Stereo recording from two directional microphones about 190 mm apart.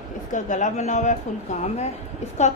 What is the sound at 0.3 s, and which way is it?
Speech, 40° left (ahead or behind).